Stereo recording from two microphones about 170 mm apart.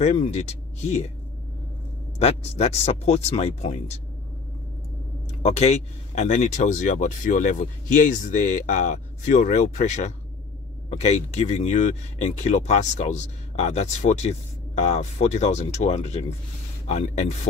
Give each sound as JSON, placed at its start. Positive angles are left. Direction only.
{"t": 0.0, "sound": "speech", "side_deg": 40}
{"t": 2.1, "sound": "speech", "side_deg": 40}
{"t": 5.4, "sound": "a man's voice", "side_deg": 40}